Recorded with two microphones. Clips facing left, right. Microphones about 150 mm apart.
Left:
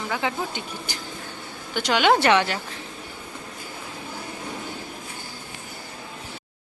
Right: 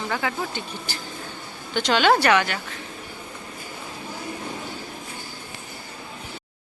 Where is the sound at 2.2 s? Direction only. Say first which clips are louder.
Left 1 dB; 25° left (ahead or behind).